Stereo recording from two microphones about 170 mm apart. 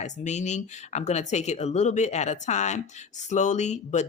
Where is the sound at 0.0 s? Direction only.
45° left (ahead or behind).